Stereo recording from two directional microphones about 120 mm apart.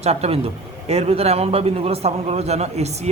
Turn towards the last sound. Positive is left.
turn(degrees=-65)  # may be behind; listen again after turning